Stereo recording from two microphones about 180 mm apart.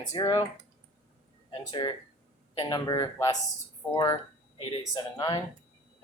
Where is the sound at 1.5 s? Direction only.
25° left (ahead or behind).